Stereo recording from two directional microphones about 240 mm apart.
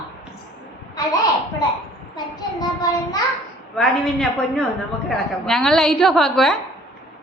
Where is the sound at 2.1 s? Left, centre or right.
Centre.